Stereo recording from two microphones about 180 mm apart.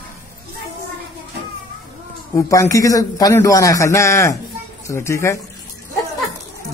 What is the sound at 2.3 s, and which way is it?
A man's voice, 15° left (ahead or behind).